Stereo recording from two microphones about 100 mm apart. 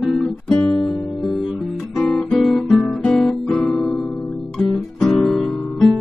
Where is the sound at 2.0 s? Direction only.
Centre (ahead or behind).